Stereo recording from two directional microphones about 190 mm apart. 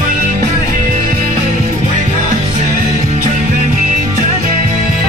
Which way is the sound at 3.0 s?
40° right (ahead or behind).